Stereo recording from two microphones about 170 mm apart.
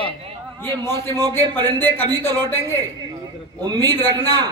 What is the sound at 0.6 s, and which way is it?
A man's voice, 15° left (ahead or behind).